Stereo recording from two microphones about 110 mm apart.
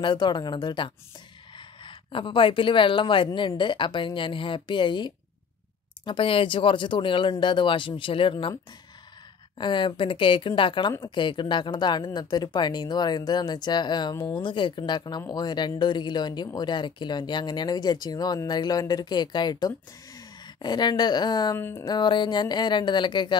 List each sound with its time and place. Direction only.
0.0 s speech: 45° left (ahead or behind)
9.6 s speech: 45° left (ahead or behind)
21.5 s speech: 20° left (ahead or behind)
21.8 s speech: 45° left (ahead or behind)